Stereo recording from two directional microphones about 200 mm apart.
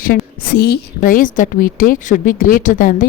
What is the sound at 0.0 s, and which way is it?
Speech, 45° left (ahead or behind).